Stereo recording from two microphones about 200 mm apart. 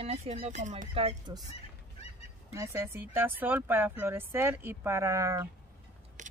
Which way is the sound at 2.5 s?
15° right (ahead or behind).